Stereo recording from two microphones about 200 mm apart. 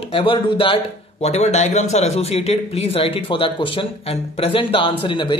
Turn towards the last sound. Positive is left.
turn(degrees=25)  # may be behind; listen again after turning